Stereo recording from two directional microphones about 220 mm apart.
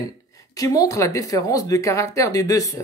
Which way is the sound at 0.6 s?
15° left (ahead or behind).